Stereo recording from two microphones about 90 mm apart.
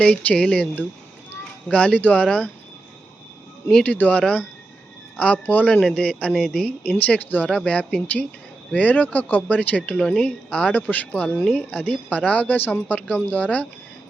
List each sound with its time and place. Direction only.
0.0 s speech: 15° left (ahead or behind)
3.7 s speech: 15° left (ahead or behind)